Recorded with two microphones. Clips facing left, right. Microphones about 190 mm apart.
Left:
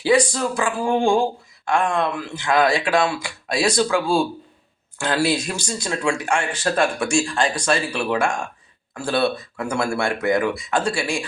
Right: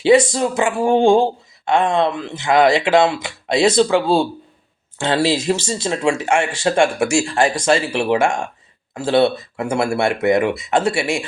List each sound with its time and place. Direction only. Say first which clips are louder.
0.0 s speech: right 5 dB; 25° right (ahead or behind)